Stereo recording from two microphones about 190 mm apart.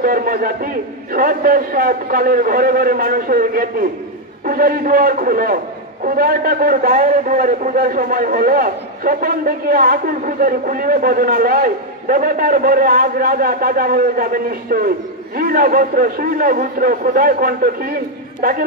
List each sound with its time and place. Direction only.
0.0 s a man's voice: 50° right (ahead or behind)